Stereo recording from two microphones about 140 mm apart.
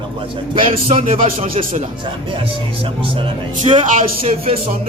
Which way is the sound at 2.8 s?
40° right (ahead or behind).